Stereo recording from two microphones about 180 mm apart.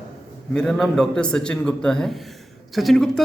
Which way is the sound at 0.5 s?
Centre (ahead or behind).